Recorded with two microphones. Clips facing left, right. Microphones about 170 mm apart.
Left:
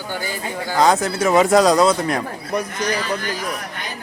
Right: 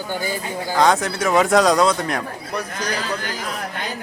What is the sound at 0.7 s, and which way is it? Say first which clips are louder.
Speech: left 1 dB; 5° left (ahead or behind).